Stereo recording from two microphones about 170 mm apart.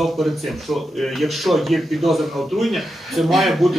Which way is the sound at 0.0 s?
Centre (ahead or behind).